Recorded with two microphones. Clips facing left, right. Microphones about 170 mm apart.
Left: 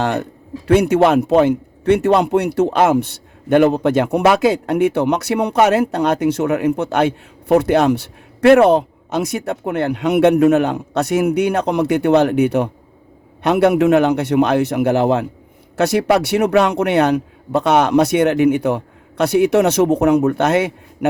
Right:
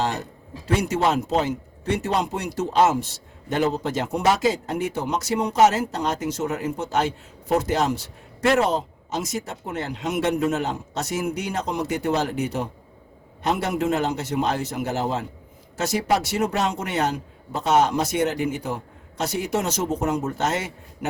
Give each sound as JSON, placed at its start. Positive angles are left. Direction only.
{"t": 0.0, "sound": "a man's voice", "side_deg": 60}